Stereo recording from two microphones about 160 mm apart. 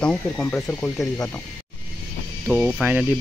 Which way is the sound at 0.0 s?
5° left (ahead or behind).